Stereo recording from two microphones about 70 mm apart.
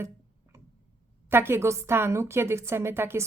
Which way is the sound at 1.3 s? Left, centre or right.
Right.